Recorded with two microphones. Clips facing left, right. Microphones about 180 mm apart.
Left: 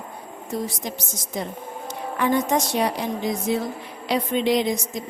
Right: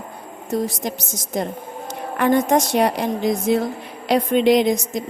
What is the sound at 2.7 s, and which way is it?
Speech, 75° right (ahead or behind).